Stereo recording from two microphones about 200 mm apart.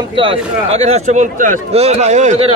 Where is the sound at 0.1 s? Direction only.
25° right (ahead or behind).